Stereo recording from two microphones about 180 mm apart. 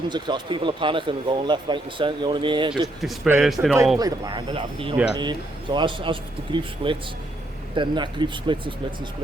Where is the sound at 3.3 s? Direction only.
5° right (ahead or behind).